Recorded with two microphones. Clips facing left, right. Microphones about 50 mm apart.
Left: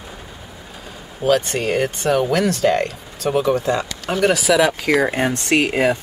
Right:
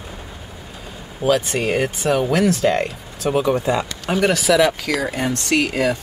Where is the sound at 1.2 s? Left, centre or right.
Centre.